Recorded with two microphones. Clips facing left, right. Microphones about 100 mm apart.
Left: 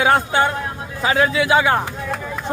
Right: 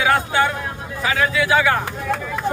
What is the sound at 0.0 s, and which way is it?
A man's voice, 25° left (ahead or behind).